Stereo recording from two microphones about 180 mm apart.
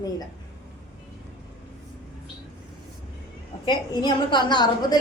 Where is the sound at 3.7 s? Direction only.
25° left (ahead or behind).